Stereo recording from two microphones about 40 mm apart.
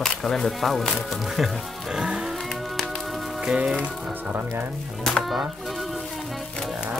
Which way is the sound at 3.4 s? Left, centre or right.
Right.